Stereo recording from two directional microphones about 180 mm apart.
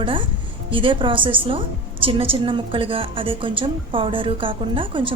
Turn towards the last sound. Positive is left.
turn(degrees=-30)  # may be behind; listen again after turning